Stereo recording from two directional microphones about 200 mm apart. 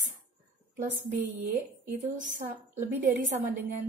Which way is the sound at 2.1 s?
40° right (ahead or behind).